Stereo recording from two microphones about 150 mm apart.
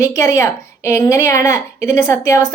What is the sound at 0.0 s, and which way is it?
Speech, 20° left (ahead or behind).